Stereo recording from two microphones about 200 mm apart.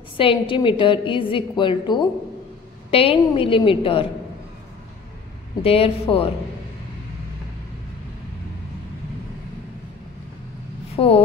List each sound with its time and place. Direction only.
0.2 s a woman's voice: 25° left (ahead or behind)
5.6 s a woman's voice: 30° left (ahead or behind)
11.0 s a woman's voice: 30° left (ahead or behind)